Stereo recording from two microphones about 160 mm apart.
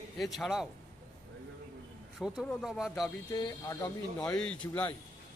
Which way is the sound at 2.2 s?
Centre (ahead or behind).